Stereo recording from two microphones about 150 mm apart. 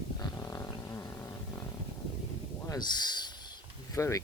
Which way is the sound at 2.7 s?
30° left (ahead or behind).